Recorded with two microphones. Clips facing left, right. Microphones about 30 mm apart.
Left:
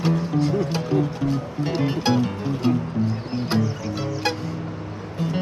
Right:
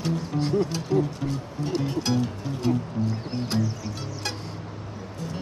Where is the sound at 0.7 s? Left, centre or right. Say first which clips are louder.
Left 3 dB; left.